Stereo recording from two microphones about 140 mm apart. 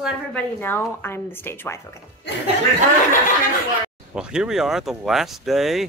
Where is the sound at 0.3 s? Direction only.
15° left (ahead or behind).